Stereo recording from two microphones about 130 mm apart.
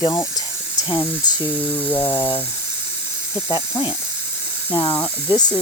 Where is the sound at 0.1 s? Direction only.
30° left (ahead or behind).